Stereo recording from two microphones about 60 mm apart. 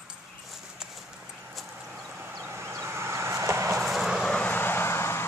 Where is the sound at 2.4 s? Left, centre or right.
Right.